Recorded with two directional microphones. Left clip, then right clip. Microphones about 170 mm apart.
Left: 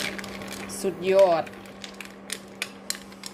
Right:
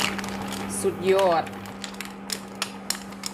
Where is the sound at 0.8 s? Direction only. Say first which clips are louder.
Left 2 dB; 35° left (ahead or behind).